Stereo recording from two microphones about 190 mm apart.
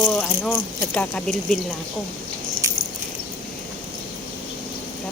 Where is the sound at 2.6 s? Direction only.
15° right (ahead or behind).